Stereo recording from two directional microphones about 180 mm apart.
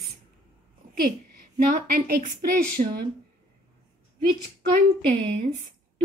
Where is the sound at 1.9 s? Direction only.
60° right (ahead or behind).